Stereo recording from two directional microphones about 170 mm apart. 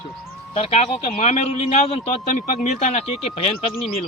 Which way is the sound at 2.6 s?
45° left (ahead or behind).